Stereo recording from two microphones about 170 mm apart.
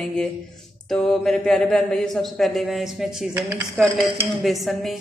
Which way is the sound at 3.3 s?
20° right (ahead or behind).